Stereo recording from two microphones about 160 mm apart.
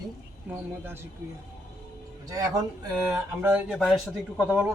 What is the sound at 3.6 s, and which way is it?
Speech, centre (ahead or behind).